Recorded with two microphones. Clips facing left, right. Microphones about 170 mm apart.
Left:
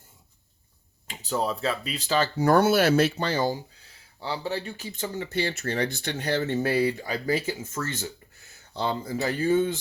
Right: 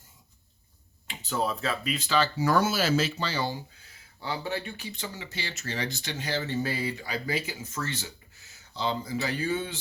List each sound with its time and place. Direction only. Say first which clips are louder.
1.0 s speech: left 2 dB; 35° left (ahead or behind)
4.2 s speech: left 2 dB; 35° left (ahead or behind); by 6.9 s 60° left (ahead or behind)
7.0 s speech: left 5 dB; 45° left (ahead or behind)